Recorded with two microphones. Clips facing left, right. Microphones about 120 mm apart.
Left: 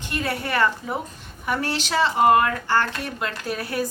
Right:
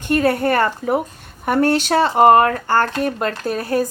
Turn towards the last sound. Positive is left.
turn(degrees=-40)  # may be behind; listen again after turning